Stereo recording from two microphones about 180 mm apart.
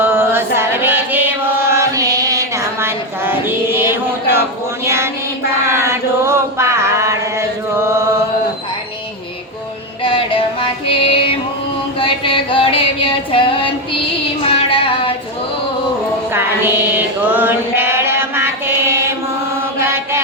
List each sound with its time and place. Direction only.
0.0 s chant: 10° right (ahead or behind)
5.6 s chant: 15° right (ahead or behind)
10.0 s music: 30° left (ahead or behind)
11.9 s female singing: 30° left (ahead or behind)
16.3 s music: 10° right (ahead or behind)
17.3 s chant: 10° right (ahead or behind)